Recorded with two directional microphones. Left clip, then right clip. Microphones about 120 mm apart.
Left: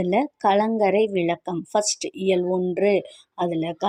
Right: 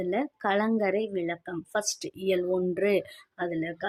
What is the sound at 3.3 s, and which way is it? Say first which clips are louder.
Speech: left 6 dB; 30° left (ahead or behind).